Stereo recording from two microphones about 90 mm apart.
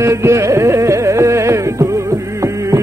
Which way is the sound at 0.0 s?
35° right (ahead or behind).